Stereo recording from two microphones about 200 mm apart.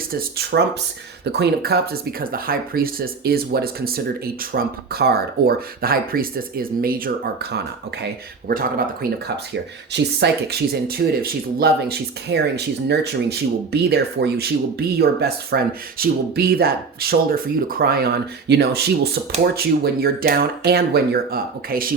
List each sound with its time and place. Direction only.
0.1 s speech: 50° right (ahead or behind)